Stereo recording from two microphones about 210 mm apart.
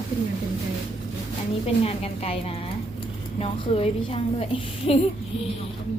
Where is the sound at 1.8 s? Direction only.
30° left (ahead or behind).